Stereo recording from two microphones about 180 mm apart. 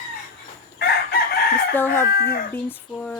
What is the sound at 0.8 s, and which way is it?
Chicken, 60° left (ahead or behind).